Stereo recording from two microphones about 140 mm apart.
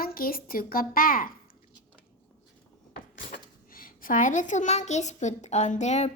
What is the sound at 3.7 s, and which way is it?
A child's voice, 90° left.